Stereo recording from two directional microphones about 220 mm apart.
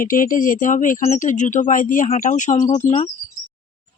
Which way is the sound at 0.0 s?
40° left (ahead or behind).